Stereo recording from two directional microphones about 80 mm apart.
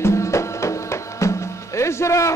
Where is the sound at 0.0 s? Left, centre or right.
Left.